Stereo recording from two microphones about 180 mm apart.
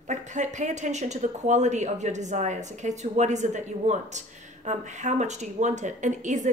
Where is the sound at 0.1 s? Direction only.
40° right (ahead or behind).